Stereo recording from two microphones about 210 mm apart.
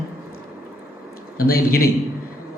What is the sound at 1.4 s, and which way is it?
Speech, 45° left (ahead or behind).